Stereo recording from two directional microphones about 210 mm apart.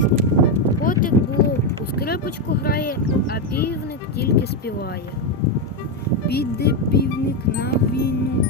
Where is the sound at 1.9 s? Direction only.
50° left (ahead or behind).